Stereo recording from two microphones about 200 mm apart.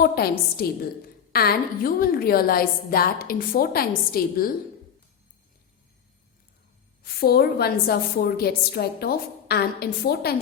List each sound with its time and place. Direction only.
0.0 s a woman's voice: 50° left (ahead or behind)
7.0 s a woman's voice: 50° left (ahead or behind)